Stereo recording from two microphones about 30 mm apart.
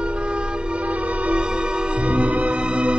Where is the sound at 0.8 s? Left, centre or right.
Right.